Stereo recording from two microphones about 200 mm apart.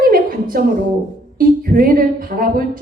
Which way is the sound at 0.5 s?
45° right (ahead or behind).